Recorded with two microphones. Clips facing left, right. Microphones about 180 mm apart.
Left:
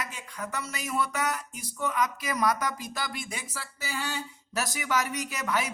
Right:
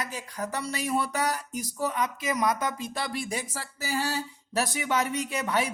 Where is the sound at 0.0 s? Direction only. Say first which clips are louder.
Right 3 dB; 35° right (ahead or behind).